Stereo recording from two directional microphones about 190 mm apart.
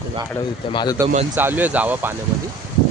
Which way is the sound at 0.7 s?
25° left (ahead or behind).